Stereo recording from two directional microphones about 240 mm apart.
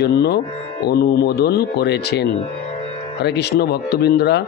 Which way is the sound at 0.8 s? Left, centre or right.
Left.